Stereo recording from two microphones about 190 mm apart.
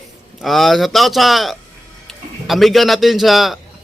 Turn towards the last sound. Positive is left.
turn(degrees=0)  # may be behind; listen again after turning